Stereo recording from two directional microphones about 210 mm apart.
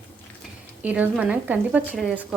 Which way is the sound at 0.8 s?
5° right (ahead or behind).